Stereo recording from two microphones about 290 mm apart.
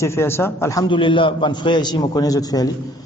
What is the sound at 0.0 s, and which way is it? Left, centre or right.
A man's voice, centre.